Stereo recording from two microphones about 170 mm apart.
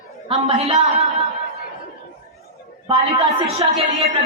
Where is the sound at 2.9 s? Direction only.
35° right (ahead or behind).